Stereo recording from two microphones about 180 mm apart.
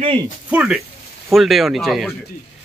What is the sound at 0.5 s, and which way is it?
Speech, 5° right (ahead or behind).